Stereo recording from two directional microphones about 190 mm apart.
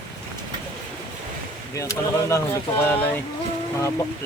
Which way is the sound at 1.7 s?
15° left (ahead or behind).